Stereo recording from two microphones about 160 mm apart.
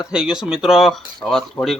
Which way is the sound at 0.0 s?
5° right (ahead or behind).